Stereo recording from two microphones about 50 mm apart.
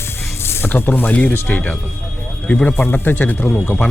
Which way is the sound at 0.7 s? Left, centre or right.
Left.